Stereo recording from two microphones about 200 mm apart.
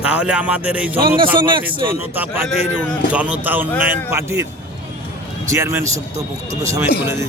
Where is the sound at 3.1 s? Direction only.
10° right (ahead or behind).